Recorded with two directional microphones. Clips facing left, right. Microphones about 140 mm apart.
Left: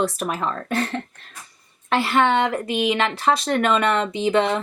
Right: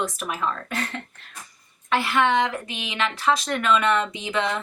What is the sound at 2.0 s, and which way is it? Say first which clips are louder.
Speech: left 3 dB; 35° left (ahead or behind).